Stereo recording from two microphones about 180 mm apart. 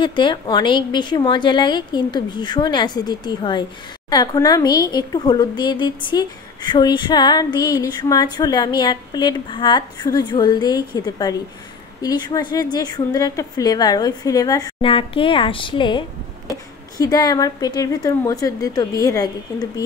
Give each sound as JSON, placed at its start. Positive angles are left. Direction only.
{"t": 0.0, "sound": "speech", "side_deg": 25}